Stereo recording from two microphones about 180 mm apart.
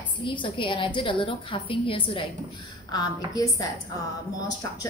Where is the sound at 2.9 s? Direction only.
20° left (ahead or behind).